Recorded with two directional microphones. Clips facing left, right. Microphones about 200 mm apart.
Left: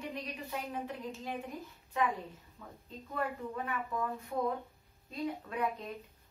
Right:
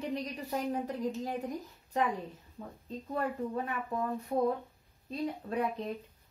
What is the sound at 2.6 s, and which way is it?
A woman's voice, 40° right (ahead or behind).